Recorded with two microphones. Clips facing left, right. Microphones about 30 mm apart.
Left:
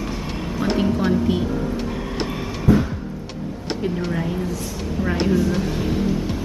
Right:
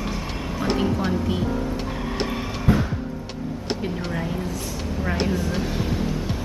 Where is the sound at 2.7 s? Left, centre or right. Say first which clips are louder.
Left 4 dB; right.